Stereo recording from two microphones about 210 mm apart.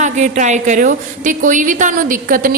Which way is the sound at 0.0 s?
35° right (ahead or behind).